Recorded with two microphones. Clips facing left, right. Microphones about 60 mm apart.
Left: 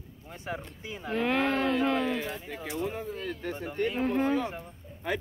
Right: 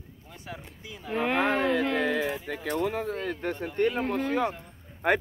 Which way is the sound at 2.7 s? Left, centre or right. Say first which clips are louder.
Right 5 dB; right.